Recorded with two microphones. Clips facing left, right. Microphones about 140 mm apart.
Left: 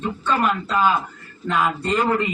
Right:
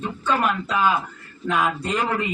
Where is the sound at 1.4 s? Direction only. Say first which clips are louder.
Left 1 dB; 10° right (ahead or behind).